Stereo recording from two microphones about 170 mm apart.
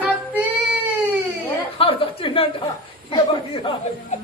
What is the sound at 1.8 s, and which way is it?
Speech, 30° left (ahead or behind).